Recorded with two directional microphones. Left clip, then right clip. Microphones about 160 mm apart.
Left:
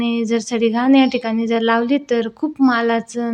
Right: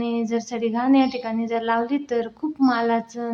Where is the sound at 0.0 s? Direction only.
30° left (ahead or behind).